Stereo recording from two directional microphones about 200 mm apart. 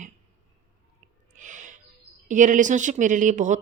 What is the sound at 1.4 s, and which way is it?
Music, 40° right (ahead or behind).